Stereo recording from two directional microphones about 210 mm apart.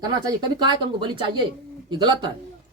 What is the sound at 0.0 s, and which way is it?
Speech, 20° right (ahead or behind).